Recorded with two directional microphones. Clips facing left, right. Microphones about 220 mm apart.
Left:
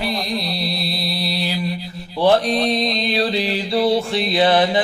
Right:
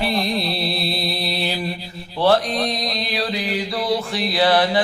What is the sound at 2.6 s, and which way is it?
Mantra, 25° left (ahead or behind).